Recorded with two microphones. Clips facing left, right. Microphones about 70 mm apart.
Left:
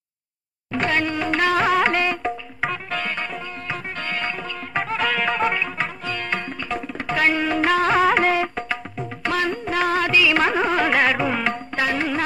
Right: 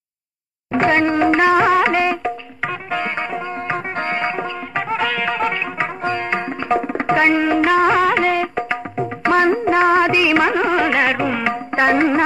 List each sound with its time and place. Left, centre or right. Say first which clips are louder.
0.7 s music: right 7 dB; right; by 2.3 s centre
2.9 s music: right 5 dB; centre
4.7 s music: right 2 dB; centre
6.0 s tabla: right 6 dB; right
7.1 s music: right 5 dB; right; by 8.6 s centre
9.2 s music: right 8 dB; right
10.4 s music: right 3 dB; centre
11.7 s music: right 10 dB; right